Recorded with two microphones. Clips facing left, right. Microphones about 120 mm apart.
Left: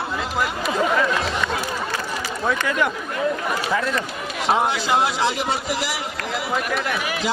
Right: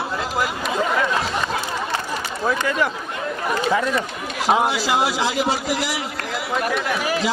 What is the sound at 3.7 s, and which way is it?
Speech, 15° right (ahead or behind).